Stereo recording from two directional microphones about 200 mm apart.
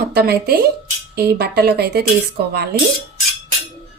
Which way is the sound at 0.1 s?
50° right (ahead or behind).